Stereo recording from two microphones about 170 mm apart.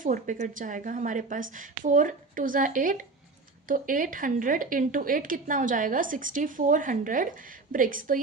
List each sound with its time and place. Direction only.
0.0 s a woman's voice: 50° right (ahead or behind)